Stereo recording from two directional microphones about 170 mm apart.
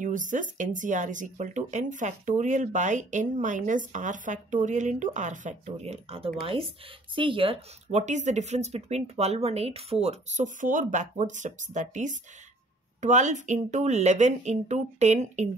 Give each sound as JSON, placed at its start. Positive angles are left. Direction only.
{"t": 0.0, "sound": "speech", "side_deg": -50}